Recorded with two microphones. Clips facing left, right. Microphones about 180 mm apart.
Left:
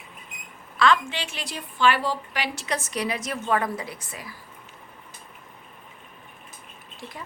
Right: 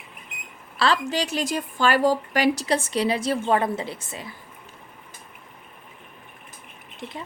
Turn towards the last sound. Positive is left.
turn(degrees=-25)  # may be behind; listen again after turning